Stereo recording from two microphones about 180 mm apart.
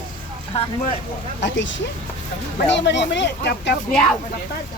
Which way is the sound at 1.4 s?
90° left.